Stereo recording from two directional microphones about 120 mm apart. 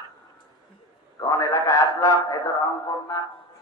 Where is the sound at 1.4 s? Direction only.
30° left (ahead or behind).